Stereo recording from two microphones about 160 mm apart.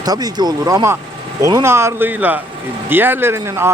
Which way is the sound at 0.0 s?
25° right (ahead or behind).